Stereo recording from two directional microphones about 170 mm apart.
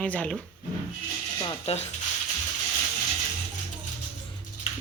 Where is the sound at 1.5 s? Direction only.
35° left (ahead or behind).